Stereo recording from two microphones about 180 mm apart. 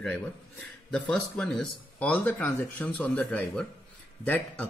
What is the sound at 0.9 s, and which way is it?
Speech, 5° left (ahead or behind).